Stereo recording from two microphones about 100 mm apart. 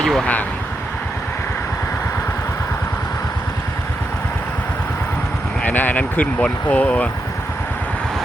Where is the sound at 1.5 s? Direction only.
25° left (ahead or behind).